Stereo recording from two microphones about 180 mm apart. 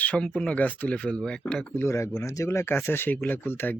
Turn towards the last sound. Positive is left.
turn(degrees=10)  # may be behind; listen again after turning